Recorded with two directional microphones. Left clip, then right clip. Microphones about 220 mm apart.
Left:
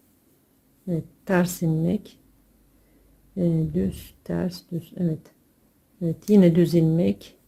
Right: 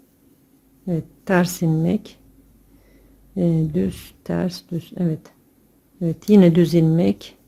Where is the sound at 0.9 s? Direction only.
5° right (ahead or behind).